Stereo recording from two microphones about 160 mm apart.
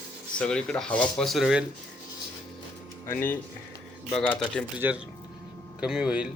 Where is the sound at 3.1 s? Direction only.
15° left (ahead or behind).